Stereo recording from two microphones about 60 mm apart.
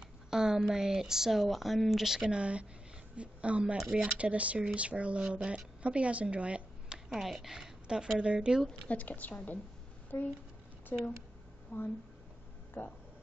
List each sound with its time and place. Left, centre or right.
0.3 s speech: centre
2.2 s a woman's voice: centre
3.7 s speech: centre
4.2 s speech: right
7.1 s speech: centre
8.8 s speech: left
10.1 s speech: left